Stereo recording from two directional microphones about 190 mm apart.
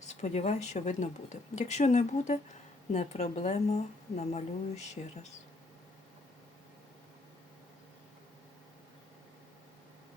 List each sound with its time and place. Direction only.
0.1 s speech: 35° left (ahead or behind)